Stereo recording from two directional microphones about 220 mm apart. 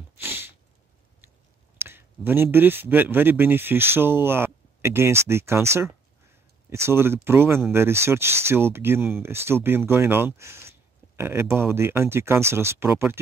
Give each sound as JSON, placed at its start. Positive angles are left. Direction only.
{"t": 0.2, "sound": "sneeze", "side_deg": -10}
{"t": 1.8, "sound": "speech", "side_deg": -10}